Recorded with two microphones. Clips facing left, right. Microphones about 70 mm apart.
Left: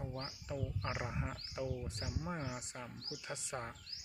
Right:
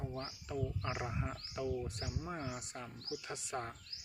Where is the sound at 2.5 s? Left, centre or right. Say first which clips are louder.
Right 1 dB; left.